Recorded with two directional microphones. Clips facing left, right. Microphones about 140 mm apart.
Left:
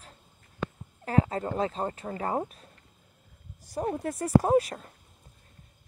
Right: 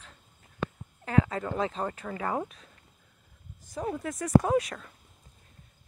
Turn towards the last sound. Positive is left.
turn(degrees=35)  # may be behind; listen again after turning